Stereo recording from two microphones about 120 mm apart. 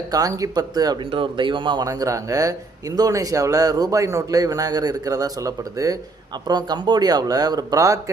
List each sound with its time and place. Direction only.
0.1 s speech: 30° right (ahead or behind)
1.9 s speech: 25° right (ahead or behind)